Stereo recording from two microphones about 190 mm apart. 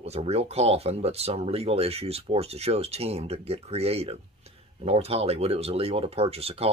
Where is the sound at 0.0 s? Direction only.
35° right (ahead or behind).